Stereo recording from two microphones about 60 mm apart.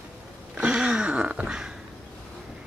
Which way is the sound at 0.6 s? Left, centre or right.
Right.